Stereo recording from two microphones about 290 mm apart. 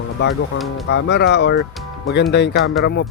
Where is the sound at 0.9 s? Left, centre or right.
Left.